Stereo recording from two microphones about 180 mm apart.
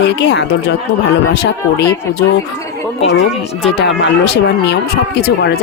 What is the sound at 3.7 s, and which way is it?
Speech, 70° left (ahead or behind).